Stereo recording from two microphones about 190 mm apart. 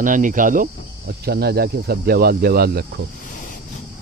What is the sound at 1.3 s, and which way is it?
Speech, 55° right (ahead or behind).